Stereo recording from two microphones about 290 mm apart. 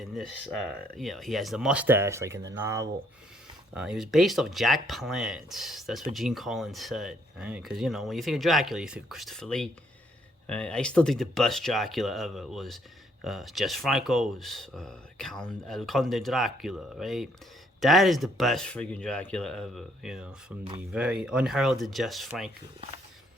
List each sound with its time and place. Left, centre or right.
0.0 s speech: centre